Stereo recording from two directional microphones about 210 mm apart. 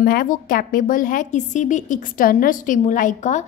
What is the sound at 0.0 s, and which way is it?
A woman's voice, 40° left (ahead or behind).